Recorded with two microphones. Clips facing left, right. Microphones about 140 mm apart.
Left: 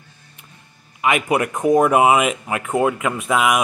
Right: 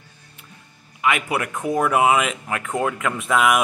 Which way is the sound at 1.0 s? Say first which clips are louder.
Left 4 dB; 20° left (ahead or behind).